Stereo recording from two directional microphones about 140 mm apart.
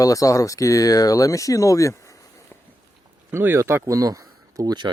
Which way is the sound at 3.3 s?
15° right (ahead or behind).